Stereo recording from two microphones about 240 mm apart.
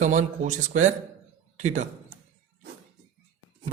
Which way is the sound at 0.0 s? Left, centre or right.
Right.